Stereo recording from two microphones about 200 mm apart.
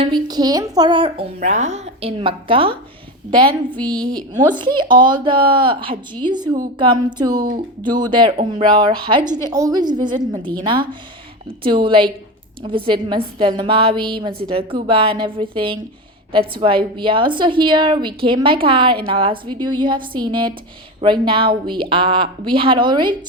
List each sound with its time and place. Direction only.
0.0 s speech: 20° right (ahead or behind)
1.4 s speech: 35° right (ahead or behind)
3.8 s a woman's voice: 5° left (ahead or behind)
4.1 s speech: 20° right (ahead or behind)